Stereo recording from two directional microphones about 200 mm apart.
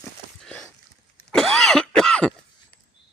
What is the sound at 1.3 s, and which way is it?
Cough, 5° left (ahead or behind).